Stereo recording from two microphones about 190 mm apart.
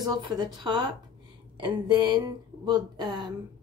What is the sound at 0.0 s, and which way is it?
Speech, 20° right (ahead or behind).